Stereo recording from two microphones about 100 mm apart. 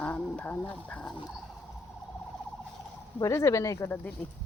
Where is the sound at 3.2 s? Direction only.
30° left (ahead or behind).